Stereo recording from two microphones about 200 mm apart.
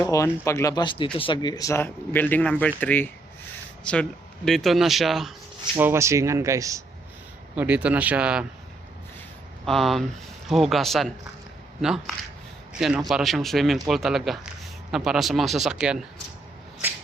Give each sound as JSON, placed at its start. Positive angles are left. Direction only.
{"t": 0.0, "sound": "speech", "side_deg": 15}
{"t": 5.7, "sound": "speech", "side_deg": -15}
{"t": 9.6, "sound": "speech", "side_deg": 0}